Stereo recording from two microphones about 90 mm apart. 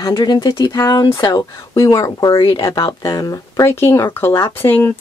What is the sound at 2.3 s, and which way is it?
Speech, 65° left (ahead or behind).